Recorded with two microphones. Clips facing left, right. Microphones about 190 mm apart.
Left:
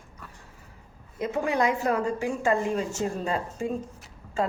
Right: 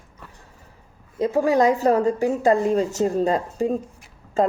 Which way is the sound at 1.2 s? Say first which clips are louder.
Right 7 dB; 35° right (ahead or behind).